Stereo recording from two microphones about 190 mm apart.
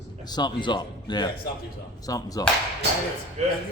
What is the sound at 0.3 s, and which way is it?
A man's voice, 20° left (ahead or behind).